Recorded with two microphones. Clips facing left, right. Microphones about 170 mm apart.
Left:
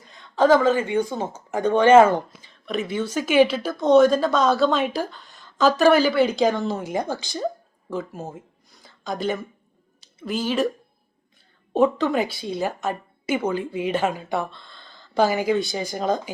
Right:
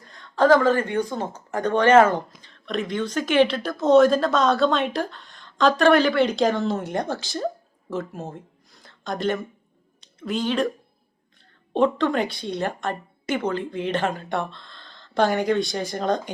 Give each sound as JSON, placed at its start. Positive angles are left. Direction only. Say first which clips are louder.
{"t": 0.0, "sound": "a sound", "louder": "right 1 dB", "side_deg": 5}
{"t": 0.4, "sound": "a woman's voice", "louder": "even", "side_deg": 5}
{"t": 11.7, "sound": "speech", "louder": "left 1 dB", "side_deg": 5}